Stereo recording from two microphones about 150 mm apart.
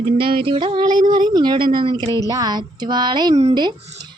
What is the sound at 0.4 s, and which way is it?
A child's voice, 35° right (ahead or behind).